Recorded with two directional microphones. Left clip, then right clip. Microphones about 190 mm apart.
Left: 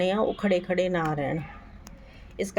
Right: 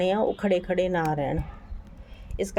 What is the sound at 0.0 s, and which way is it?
Speech, centre (ahead or behind).